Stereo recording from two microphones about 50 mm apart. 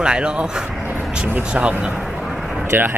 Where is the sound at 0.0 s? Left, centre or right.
Centre.